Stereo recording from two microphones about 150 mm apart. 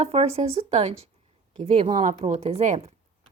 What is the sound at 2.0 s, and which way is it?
Speech, 55° right (ahead or behind).